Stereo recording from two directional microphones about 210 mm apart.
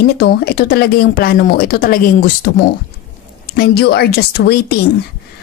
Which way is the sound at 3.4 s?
50° left (ahead or behind).